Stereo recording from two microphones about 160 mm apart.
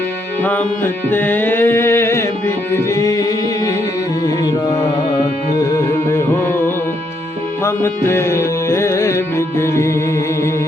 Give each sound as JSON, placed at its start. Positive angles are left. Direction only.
{"t": 1.1, "sound": "music", "side_deg": 10}
{"t": 5.7, "sound": "music", "side_deg": 15}
{"t": 7.6, "sound": "music", "side_deg": 15}